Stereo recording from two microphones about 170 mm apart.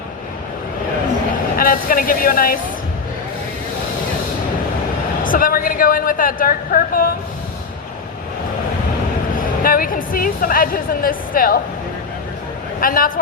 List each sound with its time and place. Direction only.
1.5 s speech: 55° left (ahead or behind)
5.2 s a woman's voice: 55° left (ahead or behind)
9.6 s a woman's voice: 55° left (ahead or behind)
12.8 s a woman's voice: 55° left (ahead or behind)